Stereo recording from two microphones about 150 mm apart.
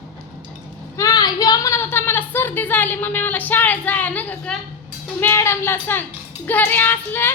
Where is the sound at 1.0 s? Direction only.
25° left (ahead or behind).